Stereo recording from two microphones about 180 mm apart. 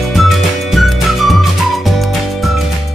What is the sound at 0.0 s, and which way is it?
Music, centre (ahead or behind).